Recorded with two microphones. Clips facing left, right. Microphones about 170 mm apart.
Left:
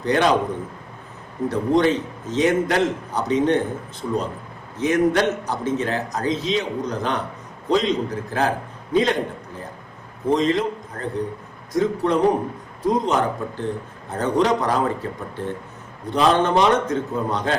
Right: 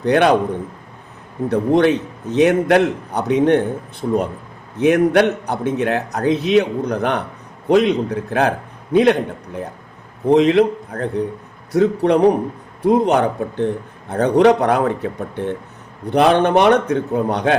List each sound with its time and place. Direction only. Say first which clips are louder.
0.0 s a man's voice: right 5 dB; 60° right (ahead or behind)
1.5 s a man's voice: right 4 dB; 65° right (ahead or behind)
4.0 s speech: right 5 dB; 45° right (ahead or behind)
4.8 s a man's voice: right 5 dB; 65° right (ahead or behind)
10.2 s a man's voice: right 7 dB; 70° right (ahead or behind)